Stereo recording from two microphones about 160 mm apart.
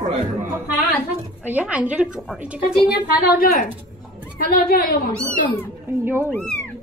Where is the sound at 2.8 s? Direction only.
70° left (ahead or behind).